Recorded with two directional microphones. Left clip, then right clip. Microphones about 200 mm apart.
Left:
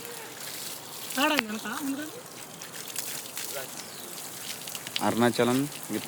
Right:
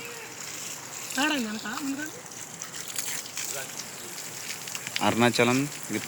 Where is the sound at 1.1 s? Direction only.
10° left (ahead or behind).